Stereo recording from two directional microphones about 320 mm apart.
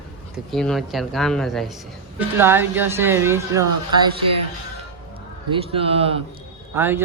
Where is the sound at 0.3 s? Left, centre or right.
Centre.